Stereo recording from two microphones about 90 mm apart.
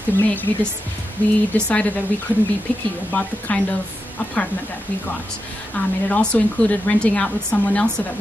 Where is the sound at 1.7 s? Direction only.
15° left (ahead or behind).